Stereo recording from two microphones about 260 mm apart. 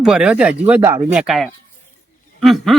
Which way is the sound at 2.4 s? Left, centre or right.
Centre.